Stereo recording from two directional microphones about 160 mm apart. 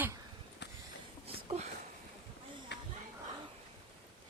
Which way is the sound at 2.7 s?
90° left.